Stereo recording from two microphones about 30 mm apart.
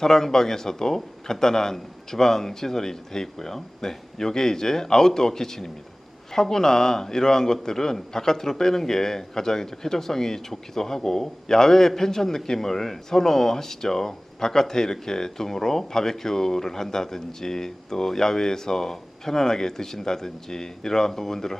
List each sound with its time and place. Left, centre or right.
0.0 s a man's voice: centre